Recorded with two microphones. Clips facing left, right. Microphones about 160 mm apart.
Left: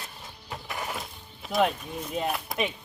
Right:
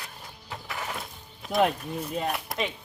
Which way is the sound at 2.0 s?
5° left (ahead or behind).